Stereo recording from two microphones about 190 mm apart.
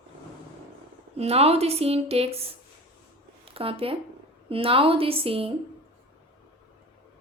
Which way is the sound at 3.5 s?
30° right (ahead or behind).